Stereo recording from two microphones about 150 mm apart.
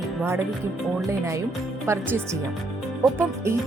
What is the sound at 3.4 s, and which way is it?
Speech, 15° right (ahead or behind).